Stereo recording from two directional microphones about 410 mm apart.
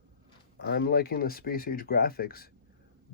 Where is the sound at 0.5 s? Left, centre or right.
Left.